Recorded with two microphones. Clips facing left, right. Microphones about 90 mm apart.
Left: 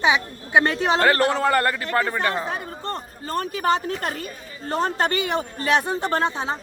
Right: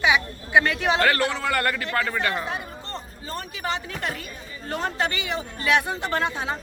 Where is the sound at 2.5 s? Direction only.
50° left (ahead or behind).